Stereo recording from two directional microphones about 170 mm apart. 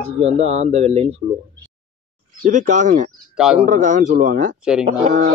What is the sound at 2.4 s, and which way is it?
Speech, 50° right (ahead or behind).